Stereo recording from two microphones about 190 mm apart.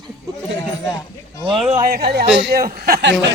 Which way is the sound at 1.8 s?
55° right (ahead or behind).